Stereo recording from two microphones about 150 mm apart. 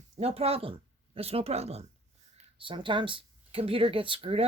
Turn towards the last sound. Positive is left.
turn(degrees=-35)  # may be behind; listen again after turning